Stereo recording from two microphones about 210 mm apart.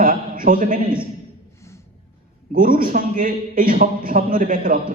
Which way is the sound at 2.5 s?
40° right (ahead or behind).